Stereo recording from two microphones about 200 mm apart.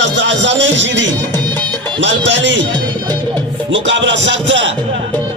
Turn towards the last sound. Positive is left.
turn(degrees=-65)  # may be behind; listen again after turning